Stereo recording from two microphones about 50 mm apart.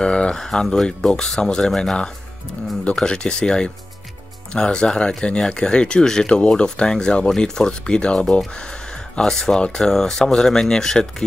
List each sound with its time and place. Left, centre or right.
0.0 s a sound: centre
0.4 s speech: centre
3.0 s speech: centre